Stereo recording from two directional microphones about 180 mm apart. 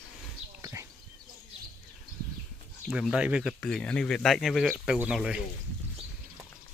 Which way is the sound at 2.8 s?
5° right (ahead or behind).